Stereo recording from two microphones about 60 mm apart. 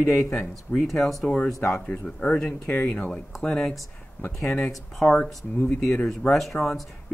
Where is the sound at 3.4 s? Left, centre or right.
Centre.